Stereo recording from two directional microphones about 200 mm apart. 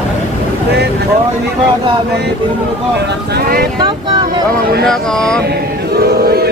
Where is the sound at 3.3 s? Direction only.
45° right (ahead or behind).